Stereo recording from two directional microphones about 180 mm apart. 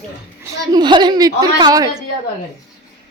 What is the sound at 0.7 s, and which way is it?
A woman's voice, 25° right (ahead or behind).